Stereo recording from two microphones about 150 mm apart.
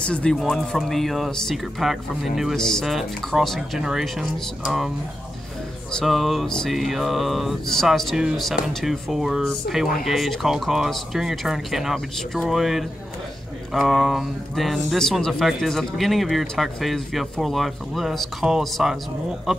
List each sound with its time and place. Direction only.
0.0 s speech: 5° left (ahead or behind)